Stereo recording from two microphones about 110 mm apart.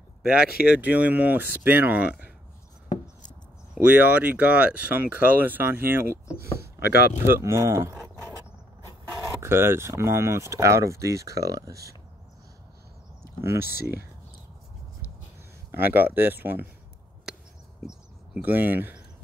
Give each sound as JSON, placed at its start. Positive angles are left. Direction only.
{"t": 0.2, "sound": "speech", "side_deg": -10}
{"t": 3.7, "sound": "speech", "side_deg": -15}
{"t": 7.2, "sound": "speech", "side_deg": -25}
{"t": 7.9, "sound": "a sound", "side_deg": 0}
{"t": 9.4, "sound": "speech", "side_deg": -20}
{"t": 13.2, "sound": "speech", "side_deg": -25}
{"t": 15.7, "sound": "speech", "side_deg": -20}
{"t": 17.7, "sound": "speech", "side_deg": -10}